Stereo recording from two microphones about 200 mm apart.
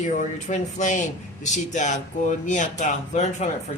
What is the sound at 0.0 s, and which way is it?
Speech, 40° left (ahead or behind).